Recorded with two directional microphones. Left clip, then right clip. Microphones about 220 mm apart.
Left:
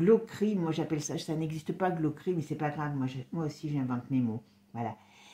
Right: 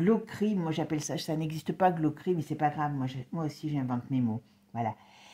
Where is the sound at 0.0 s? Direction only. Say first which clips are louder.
Left 3 dB; 40° right (ahead or behind).